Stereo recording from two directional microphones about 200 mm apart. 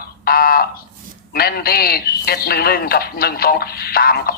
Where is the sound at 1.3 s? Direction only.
50° left (ahead or behind).